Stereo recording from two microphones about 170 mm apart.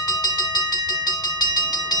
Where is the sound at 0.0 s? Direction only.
25° left (ahead or behind).